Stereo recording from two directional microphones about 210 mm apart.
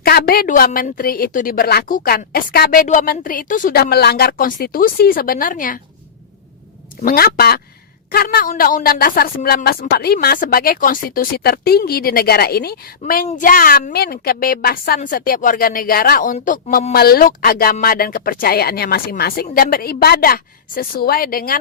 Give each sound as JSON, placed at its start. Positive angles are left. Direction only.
{"t": 0.0, "sound": "a woman's voice", "side_deg": 45}
{"t": 7.0, "sound": "a woman's voice", "side_deg": 45}